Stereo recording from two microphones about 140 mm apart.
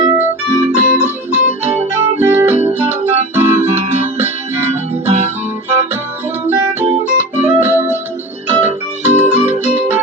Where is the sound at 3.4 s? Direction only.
15° right (ahead or behind).